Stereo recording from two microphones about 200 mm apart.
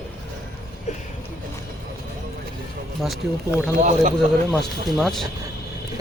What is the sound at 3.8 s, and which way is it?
Speech, 40° right (ahead or behind).